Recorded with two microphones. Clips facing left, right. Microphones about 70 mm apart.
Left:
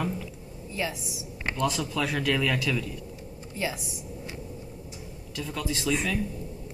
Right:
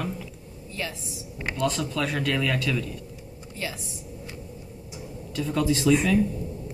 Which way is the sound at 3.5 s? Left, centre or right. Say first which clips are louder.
Left 3 dB; centre.